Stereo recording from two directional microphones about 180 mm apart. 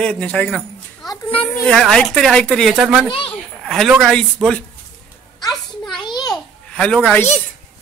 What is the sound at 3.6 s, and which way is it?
Speech, centre (ahead or behind).